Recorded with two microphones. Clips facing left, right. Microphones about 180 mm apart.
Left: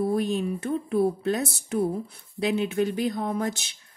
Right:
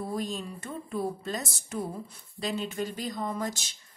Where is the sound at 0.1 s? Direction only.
60° left (ahead or behind).